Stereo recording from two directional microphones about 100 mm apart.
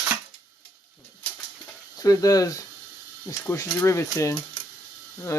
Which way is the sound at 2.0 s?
35° left (ahead or behind).